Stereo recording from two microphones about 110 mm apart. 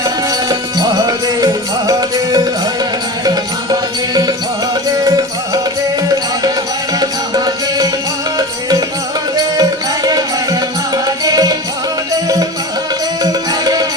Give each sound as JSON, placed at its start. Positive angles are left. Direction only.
{"t": 0.0, "sound": "music", "side_deg": -35}
{"t": 7.0, "sound": "music", "side_deg": -35}
{"t": 9.6, "sound": "music", "side_deg": -35}
{"t": 13.2, "sound": "music", "side_deg": -35}